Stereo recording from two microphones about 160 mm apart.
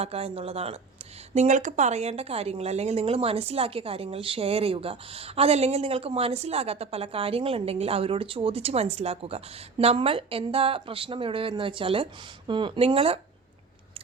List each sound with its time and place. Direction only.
0.0 s a woman's voice: 40° right (ahead or behind)